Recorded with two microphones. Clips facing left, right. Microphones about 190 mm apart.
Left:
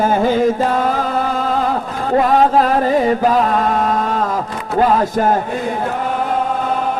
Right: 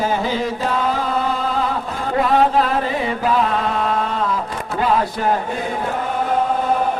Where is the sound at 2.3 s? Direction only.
40° left (ahead or behind).